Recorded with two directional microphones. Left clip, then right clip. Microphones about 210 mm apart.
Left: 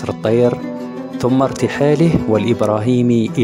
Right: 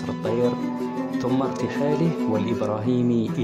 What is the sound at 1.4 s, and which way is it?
Speech, 40° left (ahead or behind).